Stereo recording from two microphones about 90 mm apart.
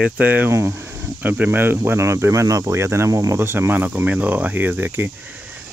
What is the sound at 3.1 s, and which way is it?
Cricket, 40° right (ahead or behind).